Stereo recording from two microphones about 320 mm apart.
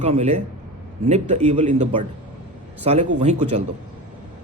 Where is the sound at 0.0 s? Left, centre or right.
Centre.